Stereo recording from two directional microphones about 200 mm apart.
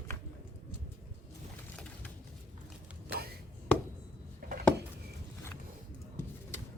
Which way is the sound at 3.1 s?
50° right (ahead or behind).